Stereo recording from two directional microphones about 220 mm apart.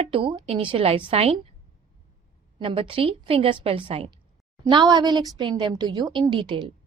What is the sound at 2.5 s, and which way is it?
Speech, 25° right (ahead or behind).